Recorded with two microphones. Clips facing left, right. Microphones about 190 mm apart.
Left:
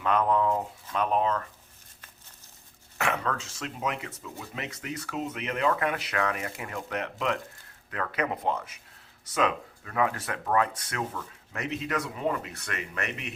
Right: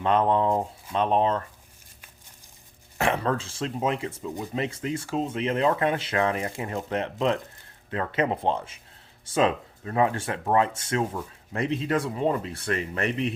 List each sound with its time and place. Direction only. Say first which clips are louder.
0.0 s speech: right 3 dB; 30° right (ahead or behind)
3.0 s speech: right 5 dB; 30° right (ahead or behind)